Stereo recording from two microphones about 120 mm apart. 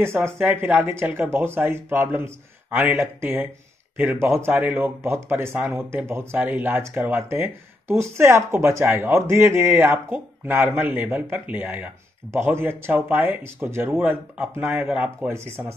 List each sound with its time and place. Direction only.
0.4 s speech: 15° right (ahead or behind)